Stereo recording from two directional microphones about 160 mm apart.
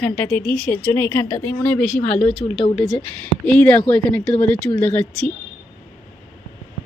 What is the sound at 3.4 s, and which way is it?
A woman's voice, 10° left (ahead or behind).